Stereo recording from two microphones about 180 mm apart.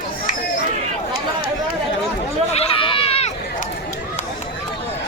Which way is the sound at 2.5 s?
30° left (ahead or behind).